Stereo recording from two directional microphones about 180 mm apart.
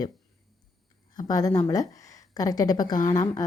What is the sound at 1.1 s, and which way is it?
A woman's voice, 20° left (ahead or behind).